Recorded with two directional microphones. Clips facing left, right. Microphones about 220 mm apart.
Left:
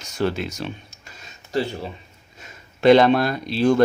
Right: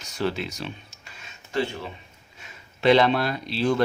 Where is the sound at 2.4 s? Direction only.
45° left (ahead or behind).